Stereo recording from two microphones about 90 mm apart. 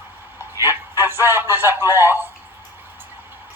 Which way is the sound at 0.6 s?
25° right (ahead or behind).